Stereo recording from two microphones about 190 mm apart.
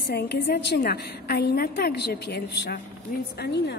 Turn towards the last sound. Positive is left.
turn(degrees=60)  # may be behind; listen again after turning